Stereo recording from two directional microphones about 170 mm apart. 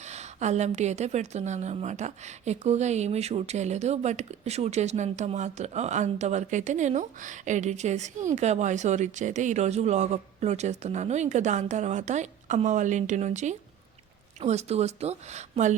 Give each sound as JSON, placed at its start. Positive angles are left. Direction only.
{"t": 0.1, "sound": "a woman's voice", "side_deg": -40}